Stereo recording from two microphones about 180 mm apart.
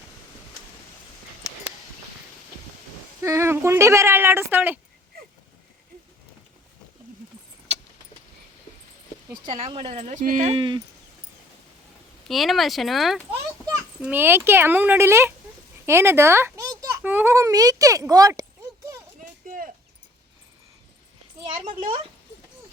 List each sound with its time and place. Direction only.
3.2 s speech: 15° right (ahead or behind)
9.6 s speech: 35° right (ahead or behind)
12.3 s speech: centre (ahead or behind)
14.0 s a child's voice: 10° right (ahead or behind)
19.5 s a sound: 50° right (ahead or behind)
21.4 s a sound: 30° right (ahead or behind)